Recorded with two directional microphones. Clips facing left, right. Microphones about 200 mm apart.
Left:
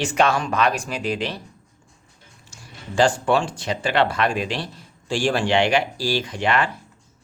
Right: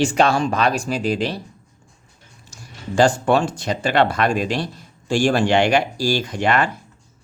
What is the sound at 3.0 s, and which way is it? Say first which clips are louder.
Speech: right 3 dB; 40° right (ahead or behind).